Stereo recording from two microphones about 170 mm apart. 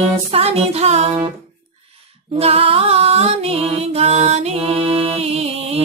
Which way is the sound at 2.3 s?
35° right (ahead or behind).